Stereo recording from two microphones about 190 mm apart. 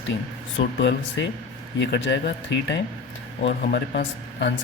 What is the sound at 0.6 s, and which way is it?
Speech, 75° left (ahead or behind).